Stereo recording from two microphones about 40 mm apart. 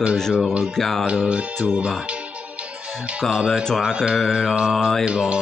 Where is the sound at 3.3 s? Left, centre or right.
Centre.